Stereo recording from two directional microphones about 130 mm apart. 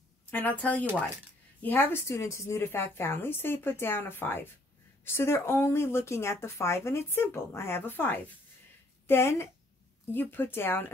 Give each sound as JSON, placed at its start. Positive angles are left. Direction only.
{"t": 0.3, "sound": "a woman's voice", "side_deg": 15}